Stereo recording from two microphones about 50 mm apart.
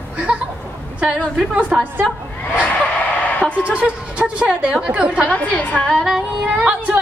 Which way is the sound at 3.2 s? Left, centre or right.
Left.